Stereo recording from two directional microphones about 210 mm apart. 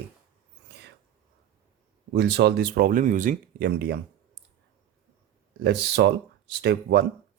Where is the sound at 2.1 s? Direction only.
50° right (ahead or behind).